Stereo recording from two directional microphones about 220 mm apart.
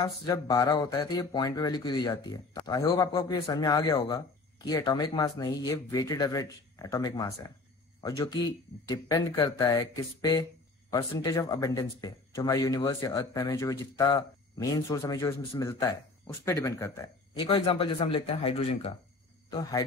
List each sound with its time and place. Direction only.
0.0 s speech: 15° left (ahead or behind)
17.3 s a man's voice: 25° left (ahead or behind)